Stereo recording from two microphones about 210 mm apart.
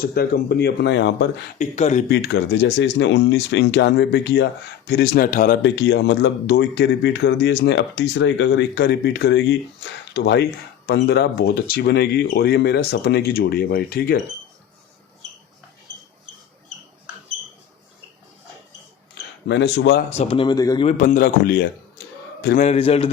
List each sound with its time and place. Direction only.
0.0 s speech: 50° left (ahead or behind)
1.5 s a man's voice: 35° left (ahead or behind)
2.0 s speech: 50° left (ahead or behind)
5.6 s speech: 55° left (ahead or behind)
19.5 s speech: 55° left (ahead or behind)
20.1 s speech: 30° left (ahead or behind)
20.8 s a man's voice: 40° left (ahead or behind)
22.6 s speech: 30° left (ahead or behind)